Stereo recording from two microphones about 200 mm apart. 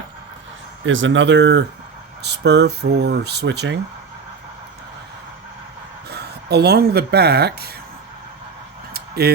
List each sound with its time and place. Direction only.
0.9 s speech: 70° right (ahead or behind)
6.1 s speech: 55° right (ahead or behind)
8.9 s a sound: 50° right (ahead or behind)